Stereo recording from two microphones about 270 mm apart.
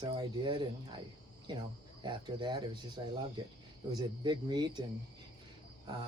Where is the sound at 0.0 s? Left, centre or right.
Centre.